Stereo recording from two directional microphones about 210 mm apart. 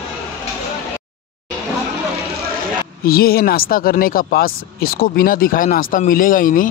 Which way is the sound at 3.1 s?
45° left (ahead or behind).